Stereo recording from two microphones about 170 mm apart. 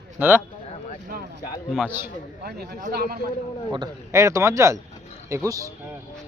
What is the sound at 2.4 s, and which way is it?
Speech, 65° right (ahead or behind).